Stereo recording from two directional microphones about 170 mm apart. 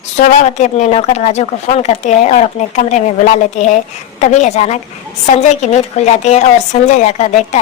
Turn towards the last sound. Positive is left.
turn(degrees=45)  # may be behind; listen again after turning